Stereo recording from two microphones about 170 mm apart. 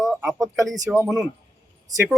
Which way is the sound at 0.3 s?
20° right (ahead or behind).